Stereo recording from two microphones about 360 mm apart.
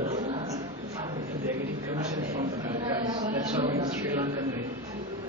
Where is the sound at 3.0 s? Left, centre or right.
Centre.